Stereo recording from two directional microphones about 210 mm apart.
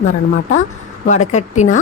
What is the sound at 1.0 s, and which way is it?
Speech, 35° left (ahead or behind).